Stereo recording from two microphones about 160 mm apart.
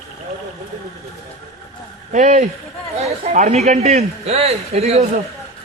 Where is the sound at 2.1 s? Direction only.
50° right (ahead or behind).